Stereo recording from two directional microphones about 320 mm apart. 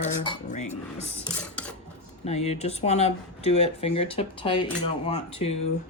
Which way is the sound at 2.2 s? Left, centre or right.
Centre.